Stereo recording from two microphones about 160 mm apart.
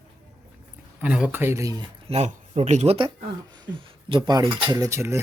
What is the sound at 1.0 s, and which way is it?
Speech, 5° right (ahead or behind).